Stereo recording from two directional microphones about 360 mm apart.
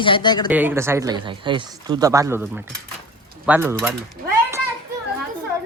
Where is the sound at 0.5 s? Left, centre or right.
Centre.